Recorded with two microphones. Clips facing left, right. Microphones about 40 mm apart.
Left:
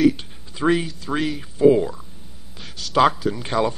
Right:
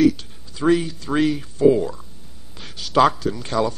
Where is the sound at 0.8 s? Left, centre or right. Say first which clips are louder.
Right 4 dB; centre.